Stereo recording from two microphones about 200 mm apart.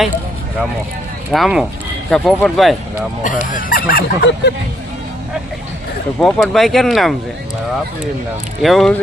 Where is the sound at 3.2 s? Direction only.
45° left (ahead or behind).